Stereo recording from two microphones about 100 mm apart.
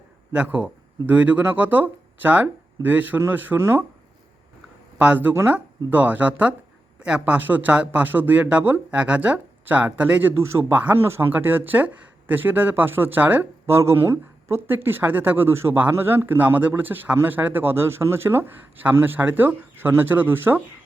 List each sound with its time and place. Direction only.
0.3 s speech: 15° right (ahead or behind)
4.9 s a man's voice: 15° right (ahead or behind)